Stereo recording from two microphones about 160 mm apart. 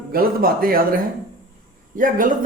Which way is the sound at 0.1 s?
70° right (ahead or behind).